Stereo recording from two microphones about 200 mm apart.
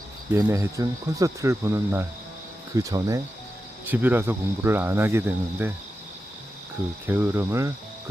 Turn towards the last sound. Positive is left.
turn(degrees=-15)  # may be behind; listen again after turning